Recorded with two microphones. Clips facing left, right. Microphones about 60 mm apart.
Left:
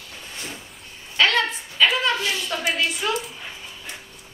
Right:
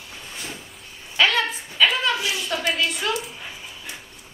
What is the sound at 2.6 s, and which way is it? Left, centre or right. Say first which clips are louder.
Speech: right 1 dB; centre.